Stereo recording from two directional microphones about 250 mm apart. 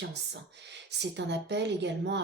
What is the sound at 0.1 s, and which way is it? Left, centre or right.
A woman's voice, right.